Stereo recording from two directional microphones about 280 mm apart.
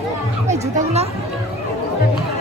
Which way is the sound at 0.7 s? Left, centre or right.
Right.